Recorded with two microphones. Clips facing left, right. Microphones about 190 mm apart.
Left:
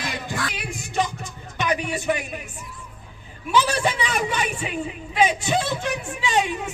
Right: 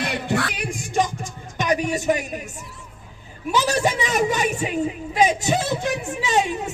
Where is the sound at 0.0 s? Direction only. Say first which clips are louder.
Right 5 dB; 65° right (ahead or behind).